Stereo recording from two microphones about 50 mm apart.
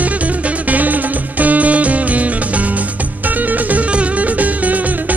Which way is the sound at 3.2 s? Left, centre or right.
Right.